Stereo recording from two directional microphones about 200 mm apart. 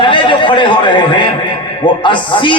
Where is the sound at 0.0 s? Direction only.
25° left (ahead or behind).